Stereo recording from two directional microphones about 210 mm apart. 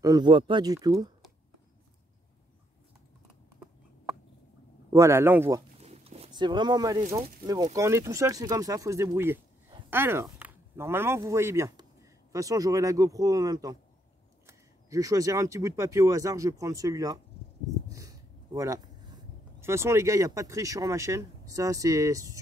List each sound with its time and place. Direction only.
0.0 s speech: 20° right (ahead or behind)
4.9 s speech: 15° right (ahead or behind)
5.8 s speech: 30° right (ahead or behind)
17.8 s a sound: 15° right (ahead or behind)
19.6 s speech: 10° right (ahead or behind)